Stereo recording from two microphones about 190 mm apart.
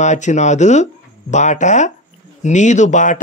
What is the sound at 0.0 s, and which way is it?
Speech, 40° left (ahead or behind).